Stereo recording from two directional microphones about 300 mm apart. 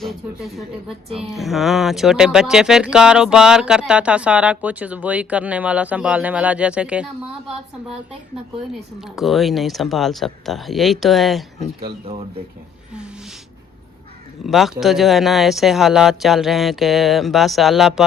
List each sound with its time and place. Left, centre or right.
0.0 s speech: centre
9.1 s speech: centre
14.4 s speech: centre